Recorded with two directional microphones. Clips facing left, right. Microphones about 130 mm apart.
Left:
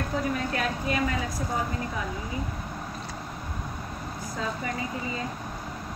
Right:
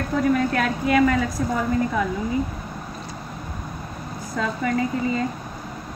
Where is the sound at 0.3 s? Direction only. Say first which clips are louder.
Right 8 dB; 70° right (ahead or behind).